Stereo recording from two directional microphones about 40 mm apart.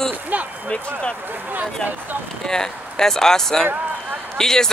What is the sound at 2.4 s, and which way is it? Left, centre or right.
Speech, centre.